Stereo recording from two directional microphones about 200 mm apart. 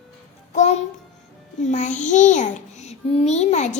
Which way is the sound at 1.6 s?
35° left (ahead or behind).